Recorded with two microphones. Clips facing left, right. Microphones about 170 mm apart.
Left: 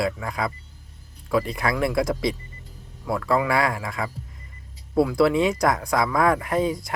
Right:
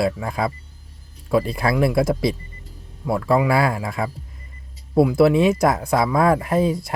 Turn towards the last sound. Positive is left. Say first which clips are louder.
# right 4 dB
turn(degrees=-25)  # may be behind; listen again after turning